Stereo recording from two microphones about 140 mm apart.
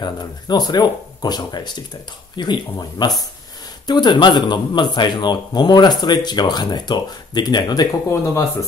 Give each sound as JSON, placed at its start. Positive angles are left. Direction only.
{"t": 0.0, "sound": "speech", "side_deg": 30}